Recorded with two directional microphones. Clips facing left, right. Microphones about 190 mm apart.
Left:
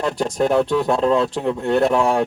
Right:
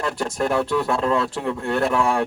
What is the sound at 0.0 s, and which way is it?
Speech, 25° left (ahead or behind).